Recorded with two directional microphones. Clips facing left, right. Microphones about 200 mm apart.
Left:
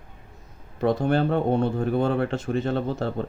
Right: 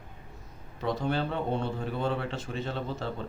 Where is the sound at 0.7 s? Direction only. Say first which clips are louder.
Left 8 dB; 50° left (ahead or behind).